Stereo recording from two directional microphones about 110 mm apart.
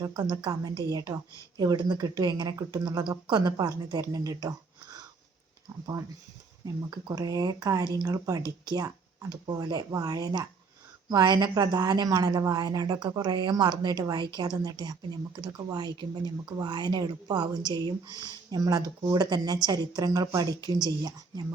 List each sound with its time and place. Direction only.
0.1 s a woman's voice: 45° right (ahead or behind)
4.1 s a sound: 35° right (ahead or behind)
5.8 s a woman's voice: 30° right (ahead or behind)
18.1 s speech: 25° left (ahead or behind)
18.5 s a woman's voice: 35° right (ahead or behind)